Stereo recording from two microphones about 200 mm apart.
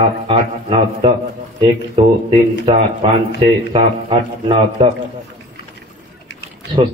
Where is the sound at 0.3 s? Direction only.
25° right (ahead or behind).